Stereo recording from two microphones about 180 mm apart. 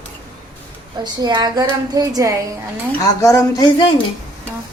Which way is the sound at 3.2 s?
15° left (ahead or behind).